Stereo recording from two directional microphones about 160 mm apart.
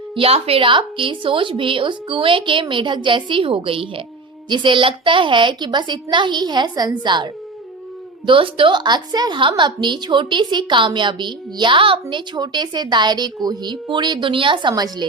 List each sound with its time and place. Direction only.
0.2 s a woman's voice: 40° right (ahead or behind)
8.3 s a woman's voice: 30° right (ahead or behind)